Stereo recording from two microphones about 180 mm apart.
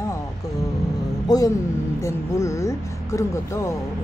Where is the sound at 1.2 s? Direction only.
20° left (ahead or behind).